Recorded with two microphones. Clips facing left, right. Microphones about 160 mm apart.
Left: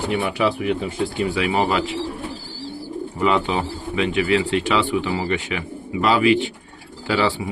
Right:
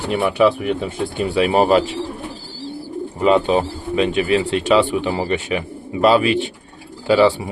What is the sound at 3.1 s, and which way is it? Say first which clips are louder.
Speech: right 5 dB; 35° right (ahead or behind).